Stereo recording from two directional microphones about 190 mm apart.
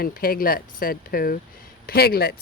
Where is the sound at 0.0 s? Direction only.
50° left (ahead or behind).